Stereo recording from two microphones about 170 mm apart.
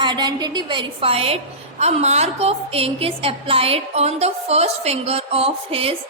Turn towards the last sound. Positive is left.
turn(degrees=-35)  # may be behind; listen again after turning